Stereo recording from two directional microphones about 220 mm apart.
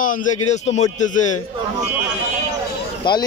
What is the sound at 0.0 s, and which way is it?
A man's voice, 35° left (ahead or behind).